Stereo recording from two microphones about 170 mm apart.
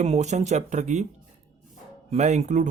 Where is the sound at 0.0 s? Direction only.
40° right (ahead or behind).